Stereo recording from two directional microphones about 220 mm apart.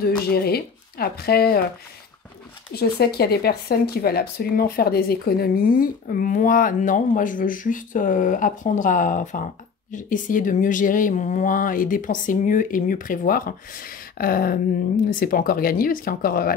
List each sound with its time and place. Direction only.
0.3 s speech: 45° left (ahead or behind)
2.7 s speech: 45° left (ahead or behind)